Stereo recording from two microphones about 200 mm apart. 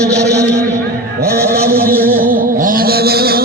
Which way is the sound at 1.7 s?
50° right (ahead or behind).